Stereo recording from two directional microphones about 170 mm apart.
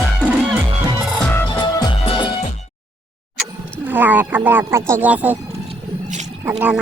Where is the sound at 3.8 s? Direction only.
10° right (ahead or behind).